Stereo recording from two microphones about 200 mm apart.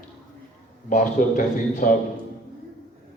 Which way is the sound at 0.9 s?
40° left (ahead or behind).